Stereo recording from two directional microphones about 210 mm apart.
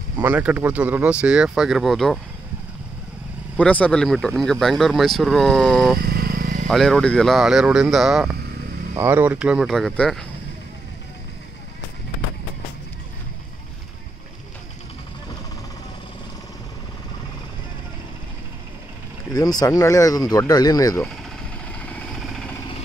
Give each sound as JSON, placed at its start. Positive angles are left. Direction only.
{"t": 0.2, "sound": "speech", "side_deg": -5}
{"t": 3.5, "sound": "speech", "side_deg": 5}
{"t": 5.9, "sound": "vehicle", "side_deg": -45}
{"t": 6.7, "sound": "speech", "side_deg": 0}
{"t": 19.3, "sound": "speech", "side_deg": 15}
{"t": 21.7, "sound": "vehicle", "side_deg": 5}